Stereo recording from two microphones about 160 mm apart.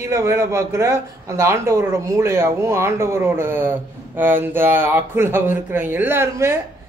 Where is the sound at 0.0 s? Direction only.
20° right (ahead or behind).